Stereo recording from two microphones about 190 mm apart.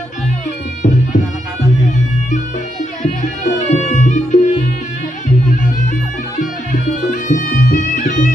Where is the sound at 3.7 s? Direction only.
40° left (ahead or behind).